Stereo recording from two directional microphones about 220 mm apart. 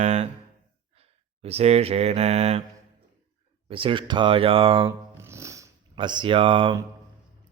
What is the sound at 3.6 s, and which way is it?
Speech, 25° right (ahead or behind).